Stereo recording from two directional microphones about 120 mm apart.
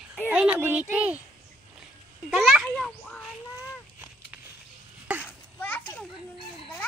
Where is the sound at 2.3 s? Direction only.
5° right (ahead or behind).